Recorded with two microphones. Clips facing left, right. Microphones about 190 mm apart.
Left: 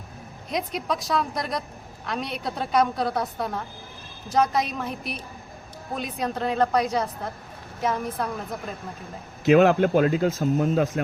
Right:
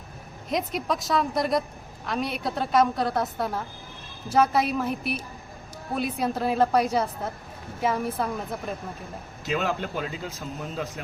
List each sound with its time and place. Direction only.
0.5 s a woman's voice: centre (ahead or behind)
9.5 s speech: 60° left (ahead or behind)